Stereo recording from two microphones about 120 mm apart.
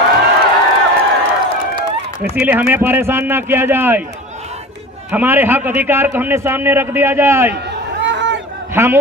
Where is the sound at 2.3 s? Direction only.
15° right (ahead or behind).